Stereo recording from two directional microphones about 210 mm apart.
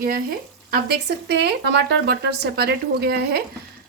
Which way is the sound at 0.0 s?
45° right (ahead or behind).